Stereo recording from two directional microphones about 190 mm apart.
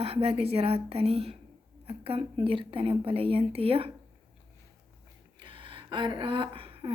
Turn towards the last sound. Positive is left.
turn(degrees=-30)  # may be behind; listen again after turning